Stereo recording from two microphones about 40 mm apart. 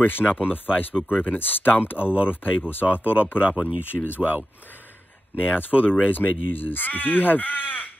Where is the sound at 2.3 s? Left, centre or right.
Left.